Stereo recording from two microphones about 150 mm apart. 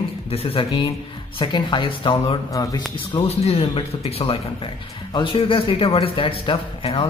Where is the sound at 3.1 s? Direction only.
40° left (ahead or behind).